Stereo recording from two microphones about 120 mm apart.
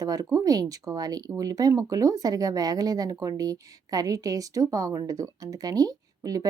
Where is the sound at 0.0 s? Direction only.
30° right (ahead or behind).